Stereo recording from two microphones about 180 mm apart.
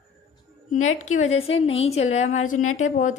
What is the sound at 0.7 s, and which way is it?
A woman's voice, 45° left (ahead or behind).